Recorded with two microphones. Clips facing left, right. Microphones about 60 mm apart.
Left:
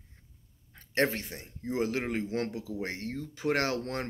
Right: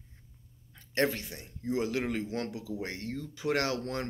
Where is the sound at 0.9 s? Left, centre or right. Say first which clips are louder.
Left 1 dB; left.